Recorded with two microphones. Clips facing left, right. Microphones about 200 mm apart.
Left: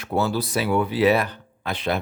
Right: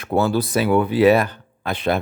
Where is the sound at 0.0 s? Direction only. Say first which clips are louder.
Right 4 dB; 55° right (ahead or behind).